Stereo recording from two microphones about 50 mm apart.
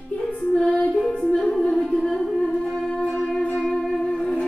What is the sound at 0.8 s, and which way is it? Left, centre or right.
Music, centre.